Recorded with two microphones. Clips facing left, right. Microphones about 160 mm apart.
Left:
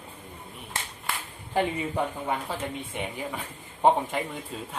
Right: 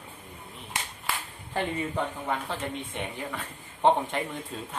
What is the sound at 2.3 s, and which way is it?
A man's voice, 10° left (ahead or behind).